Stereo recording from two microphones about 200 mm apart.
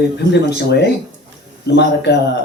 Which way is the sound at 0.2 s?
55° left (ahead or behind).